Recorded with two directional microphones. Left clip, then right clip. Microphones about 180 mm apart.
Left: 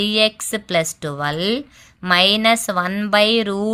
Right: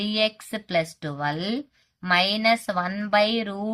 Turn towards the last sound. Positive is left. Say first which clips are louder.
# left 6 dB
turn(degrees=45)  # may be behind; listen again after turning